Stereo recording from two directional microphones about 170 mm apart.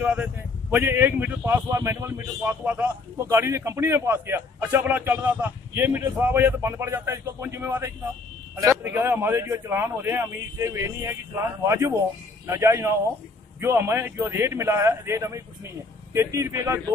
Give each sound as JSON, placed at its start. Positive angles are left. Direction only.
{"t": 0.0, "sound": "speech", "side_deg": -10}
{"t": 8.9, "sound": "speech", "side_deg": -10}